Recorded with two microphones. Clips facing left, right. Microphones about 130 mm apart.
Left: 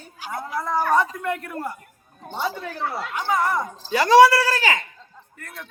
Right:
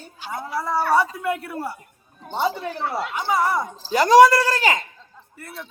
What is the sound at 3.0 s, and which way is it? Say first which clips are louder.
Speech: right 1 dB; 10° right (ahead or behind).